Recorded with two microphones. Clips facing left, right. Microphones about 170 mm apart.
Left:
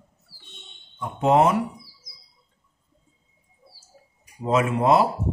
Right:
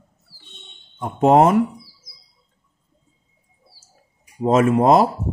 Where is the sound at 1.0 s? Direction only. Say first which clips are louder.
Right 5 dB; 45° right (ahead or behind).